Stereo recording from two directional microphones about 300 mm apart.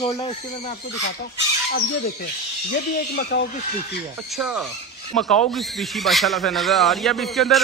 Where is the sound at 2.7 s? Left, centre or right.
Left.